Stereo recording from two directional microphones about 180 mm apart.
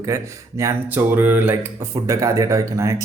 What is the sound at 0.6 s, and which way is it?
Speech, 15° right (ahead or behind).